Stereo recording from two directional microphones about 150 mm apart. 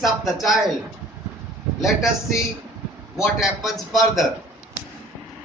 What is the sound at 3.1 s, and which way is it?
A man's voice, centre (ahead or behind).